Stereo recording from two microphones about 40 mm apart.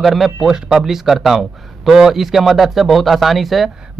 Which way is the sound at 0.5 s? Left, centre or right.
Centre.